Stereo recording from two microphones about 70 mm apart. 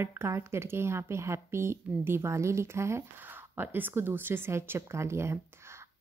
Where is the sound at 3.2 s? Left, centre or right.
Right.